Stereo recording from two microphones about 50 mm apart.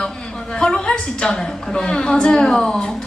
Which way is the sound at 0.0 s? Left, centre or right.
Centre.